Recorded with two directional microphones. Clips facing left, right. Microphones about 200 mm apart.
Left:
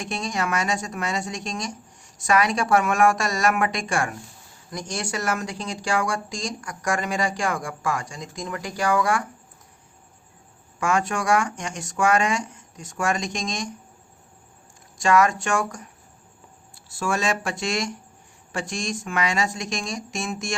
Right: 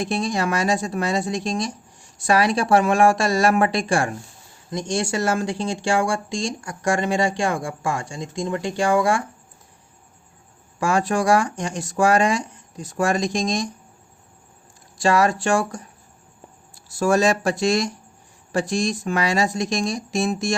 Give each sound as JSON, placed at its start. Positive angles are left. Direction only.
{"t": 0.0, "sound": "speech", "side_deg": -35}
{"t": 10.8, "sound": "speech", "side_deg": -35}
{"t": 14.9, "sound": "speech", "side_deg": -30}